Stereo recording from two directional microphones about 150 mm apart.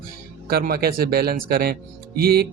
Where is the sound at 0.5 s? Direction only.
90° right.